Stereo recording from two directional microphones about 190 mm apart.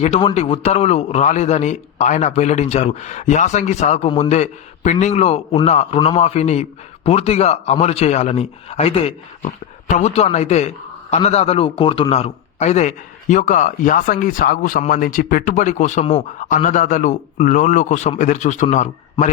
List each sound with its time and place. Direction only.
0.0 s a man's voice: 30° left (ahead or behind)